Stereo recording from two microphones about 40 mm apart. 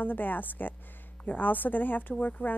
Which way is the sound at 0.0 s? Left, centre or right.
Left.